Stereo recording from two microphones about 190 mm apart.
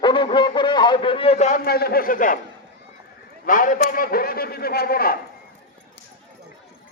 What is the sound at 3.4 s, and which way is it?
A man's voice, 45° left (ahead or behind).